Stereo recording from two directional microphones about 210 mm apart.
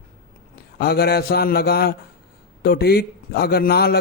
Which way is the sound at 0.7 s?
50° left (ahead or behind).